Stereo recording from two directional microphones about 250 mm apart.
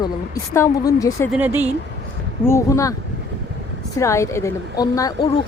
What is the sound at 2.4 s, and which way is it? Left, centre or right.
Speech, centre.